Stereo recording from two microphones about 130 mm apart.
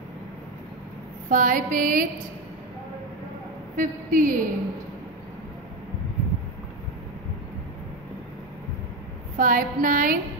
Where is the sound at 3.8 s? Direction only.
90° right.